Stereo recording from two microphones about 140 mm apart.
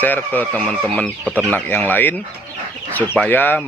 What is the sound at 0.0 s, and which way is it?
Speech, 10° left (ahead or behind).